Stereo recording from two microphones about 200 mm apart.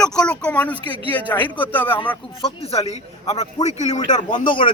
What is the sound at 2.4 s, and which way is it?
A man's voice, 30° left (ahead or behind).